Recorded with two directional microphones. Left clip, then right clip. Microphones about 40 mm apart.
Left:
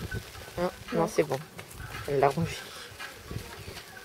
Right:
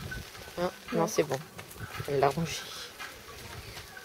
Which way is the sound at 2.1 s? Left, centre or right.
Centre.